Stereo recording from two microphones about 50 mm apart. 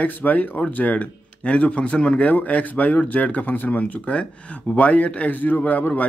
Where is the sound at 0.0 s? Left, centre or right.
Left.